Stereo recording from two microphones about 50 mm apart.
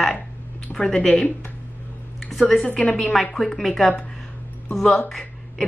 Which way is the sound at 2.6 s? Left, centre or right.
Left.